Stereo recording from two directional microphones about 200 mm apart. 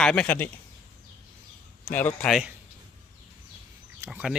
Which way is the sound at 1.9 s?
5° left (ahead or behind).